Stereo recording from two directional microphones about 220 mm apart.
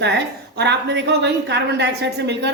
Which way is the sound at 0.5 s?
50° right (ahead or behind).